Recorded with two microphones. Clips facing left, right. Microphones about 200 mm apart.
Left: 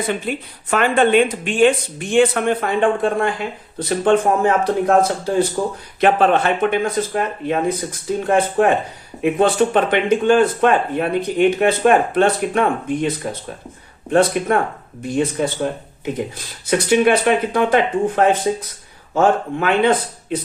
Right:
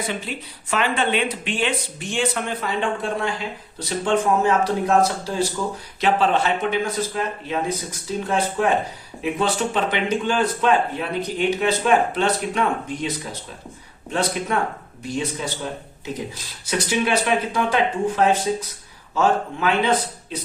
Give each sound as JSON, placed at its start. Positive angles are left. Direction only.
{"t": 0.0, "sound": "speech", "side_deg": 55}
{"t": 16.6, "sound": "speech", "side_deg": 55}